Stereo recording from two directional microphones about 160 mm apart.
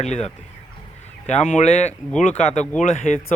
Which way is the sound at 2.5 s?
5° left (ahead or behind).